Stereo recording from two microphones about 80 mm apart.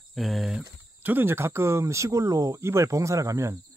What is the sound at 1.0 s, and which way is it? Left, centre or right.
Speech, right.